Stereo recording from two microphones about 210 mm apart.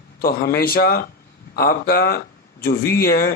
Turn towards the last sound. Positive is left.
turn(degrees=45)  # may be behind; listen again after turning